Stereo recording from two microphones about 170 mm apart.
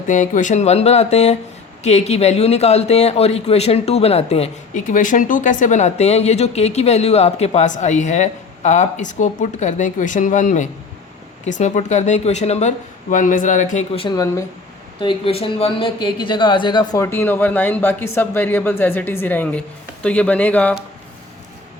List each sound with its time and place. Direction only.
0.1 s speech: 50° left (ahead or behind); by 20.7 s 10° left (ahead or behind)